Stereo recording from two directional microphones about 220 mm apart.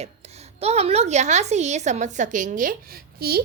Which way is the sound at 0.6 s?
30° right (ahead or behind).